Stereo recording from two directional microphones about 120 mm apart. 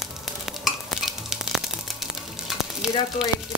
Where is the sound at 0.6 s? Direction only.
Centre (ahead or behind).